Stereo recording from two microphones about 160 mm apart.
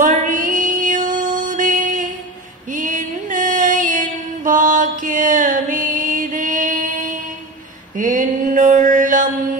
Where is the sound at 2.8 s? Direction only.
55° right (ahead or behind).